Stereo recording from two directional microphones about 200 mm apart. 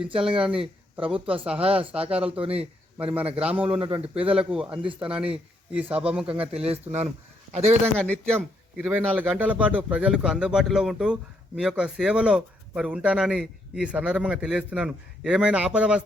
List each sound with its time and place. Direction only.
0.3 s speech: 5° right (ahead or behind)
0.9 s a man's voice: 25° right (ahead or behind)
1.9 s a man's voice: 5° right (ahead or behind)
2.2 s a man's voice: 30° right (ahead or behind)
3.0 s a man's voice: 5° right (ahead or behind)
3.8 s a man's voice: 30° right (ahead or behind)
4.4 s speech: 5° right (ahead or behind)
6.7 s speech: 30° right (ahead or behind)
7.9 s a man's voice: 5° left (ahead or behind)
8.9 s speech: 10° right (ahead or behind)